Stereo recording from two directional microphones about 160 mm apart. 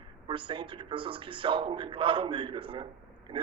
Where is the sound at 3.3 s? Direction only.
30° right (ahead or behind).